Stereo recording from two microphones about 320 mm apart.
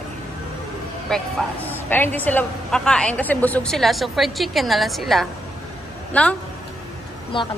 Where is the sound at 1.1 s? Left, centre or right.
Centre.